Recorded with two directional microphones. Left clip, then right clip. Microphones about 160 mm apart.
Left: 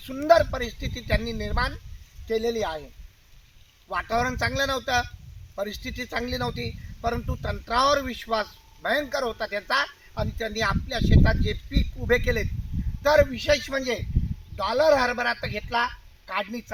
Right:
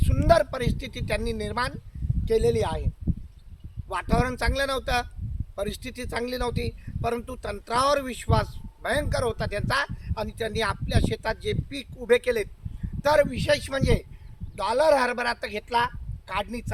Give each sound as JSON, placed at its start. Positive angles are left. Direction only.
{"t": 0.0, "sound": "a man's voice", "side_deg": -25}
{"t": 3.8, "sound": "a man's voice", "side_deg": -25}